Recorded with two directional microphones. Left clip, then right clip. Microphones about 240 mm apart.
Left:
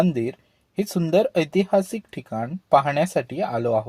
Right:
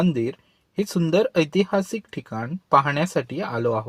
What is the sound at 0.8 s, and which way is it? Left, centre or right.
Speech, right.